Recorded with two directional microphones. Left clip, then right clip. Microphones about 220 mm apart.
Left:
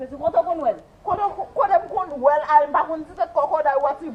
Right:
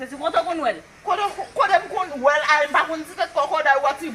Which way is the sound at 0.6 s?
25° right (ahead or behind).